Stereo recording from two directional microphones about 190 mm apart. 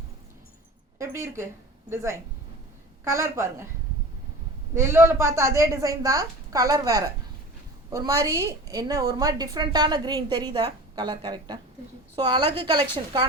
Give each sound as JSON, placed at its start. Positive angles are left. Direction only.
{"t": 0.9, "sound": "speech", "side_deg": -15}
{"t": 4.7, "sound": "a woman's voice", "side_deg": -15}